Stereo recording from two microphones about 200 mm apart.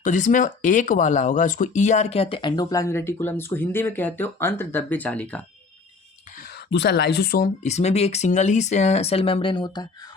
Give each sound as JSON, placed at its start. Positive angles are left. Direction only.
{"t": 0.0, "sound": "speech", "side_deg": 40}
{"t": 6.7, "sound": "speech", "side_deg": 60}
{"t": 7.6, "sound": "speech", "side_deg": 35}